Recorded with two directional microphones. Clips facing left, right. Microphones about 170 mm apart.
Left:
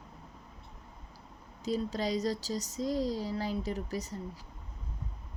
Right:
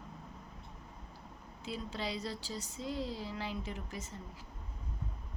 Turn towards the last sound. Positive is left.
turn(degrees=40)  # may be behind; listen again after turning